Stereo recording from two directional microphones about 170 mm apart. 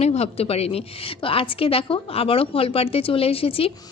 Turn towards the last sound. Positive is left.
turn(degrees=35)  # may be behind; listen again after turning